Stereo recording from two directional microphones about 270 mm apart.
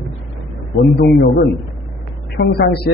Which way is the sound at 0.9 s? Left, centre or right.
Left.